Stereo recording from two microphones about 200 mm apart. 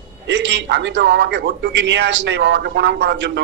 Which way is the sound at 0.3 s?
65° right (ahead or behind).